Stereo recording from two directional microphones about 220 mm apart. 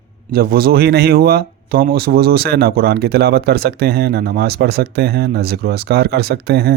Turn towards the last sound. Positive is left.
turn(degrees=-45)  # may be behind; listen again after turning